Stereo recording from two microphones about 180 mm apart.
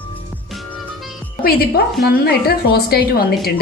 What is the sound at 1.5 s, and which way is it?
Speech, 60° left (ahead or behind).